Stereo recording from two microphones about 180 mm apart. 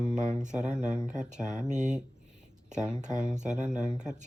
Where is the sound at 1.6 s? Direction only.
45° right (ahead or behind).